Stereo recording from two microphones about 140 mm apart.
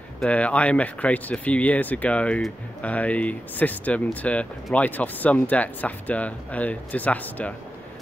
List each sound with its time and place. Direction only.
0.2 s speech: 10° left (ahead or behind)